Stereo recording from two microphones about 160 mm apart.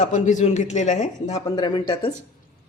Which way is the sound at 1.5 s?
30° left (ahead or behind).